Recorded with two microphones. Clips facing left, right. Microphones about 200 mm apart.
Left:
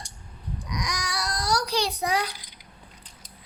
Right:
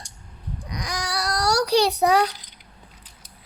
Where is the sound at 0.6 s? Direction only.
30° right (ahead or behind).